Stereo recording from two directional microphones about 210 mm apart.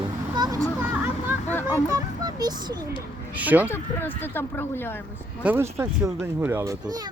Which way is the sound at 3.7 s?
10° left (ahead or behind).